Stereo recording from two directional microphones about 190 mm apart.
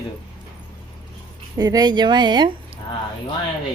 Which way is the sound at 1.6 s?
20° right (ahead or behind).